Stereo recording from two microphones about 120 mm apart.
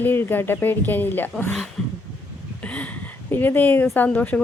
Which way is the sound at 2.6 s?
10° left (ahead or behind).